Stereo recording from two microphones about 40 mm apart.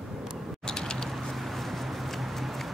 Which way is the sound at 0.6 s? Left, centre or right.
Centre.